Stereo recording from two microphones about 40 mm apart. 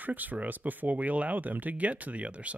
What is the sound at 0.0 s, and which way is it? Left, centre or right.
Speech, right.